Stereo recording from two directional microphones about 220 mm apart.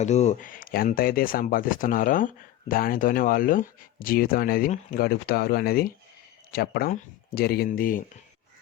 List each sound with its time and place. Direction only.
0.0 s speech: 30° left (ahead or behind)